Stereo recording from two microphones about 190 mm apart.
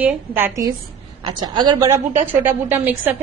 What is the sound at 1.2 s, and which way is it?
A woman's voice, 25° right (ahead or behind).